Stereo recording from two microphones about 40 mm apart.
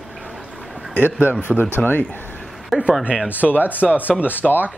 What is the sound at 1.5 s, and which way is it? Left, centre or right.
Speech, centre.